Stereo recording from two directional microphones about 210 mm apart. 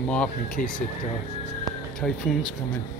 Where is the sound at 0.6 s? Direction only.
35° left (ahead or behind).